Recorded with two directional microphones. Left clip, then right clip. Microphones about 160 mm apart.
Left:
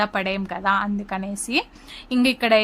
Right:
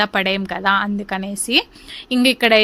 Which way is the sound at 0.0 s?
15° right (ahead or behind).